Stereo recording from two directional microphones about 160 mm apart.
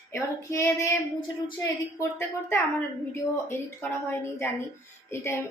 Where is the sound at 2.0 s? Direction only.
15° left (ahead or behind).